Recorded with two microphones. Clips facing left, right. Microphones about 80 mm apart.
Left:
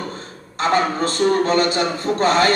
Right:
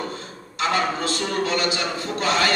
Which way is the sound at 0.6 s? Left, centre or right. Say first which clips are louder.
Left 4 dB; left.